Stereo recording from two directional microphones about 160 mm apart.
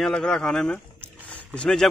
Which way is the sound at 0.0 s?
5° left (ahead or behind).